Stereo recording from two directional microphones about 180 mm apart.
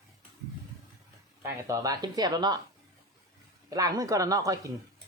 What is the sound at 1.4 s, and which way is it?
A woman's voice, 20° right (ahead or behind).